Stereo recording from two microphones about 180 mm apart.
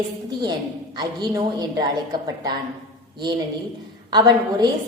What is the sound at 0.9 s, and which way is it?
A woman's voice, 20° right (ahead or behind).